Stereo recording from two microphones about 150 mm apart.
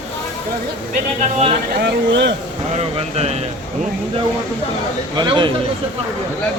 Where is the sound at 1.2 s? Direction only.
50° right (ahead or behind).